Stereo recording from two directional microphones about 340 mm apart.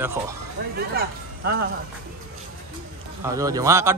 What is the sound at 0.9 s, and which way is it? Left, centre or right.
Speech, right.